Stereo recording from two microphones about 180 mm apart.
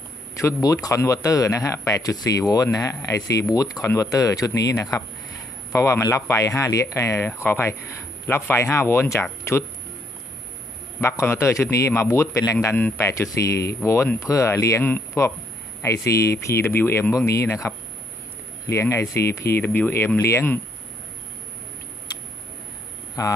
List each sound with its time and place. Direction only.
0.4 s a man's voice: 20° left (ahead or behind)
11.0 s a man's voice: 15° left (ahead or behind)
23.2 s speech: 20° left (ahead or behind)